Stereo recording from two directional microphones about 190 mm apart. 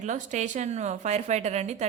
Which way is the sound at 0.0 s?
40° right (ahead or behind).